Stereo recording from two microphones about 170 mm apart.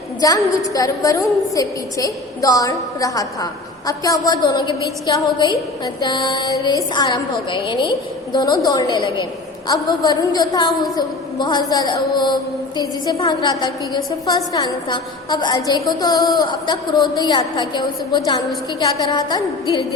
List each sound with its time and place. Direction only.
0.2 s a woman's voice: 20° left (ahead or behind)